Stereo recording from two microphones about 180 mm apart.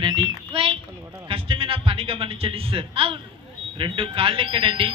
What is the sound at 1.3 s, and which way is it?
Music, 30° right (ahead or behind).